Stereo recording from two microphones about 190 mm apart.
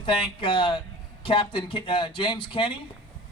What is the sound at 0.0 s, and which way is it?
Speech, 25° left (ahead or behind).